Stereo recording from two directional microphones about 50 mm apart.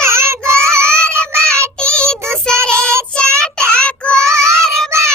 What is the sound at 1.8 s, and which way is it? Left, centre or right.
Child singing, centre.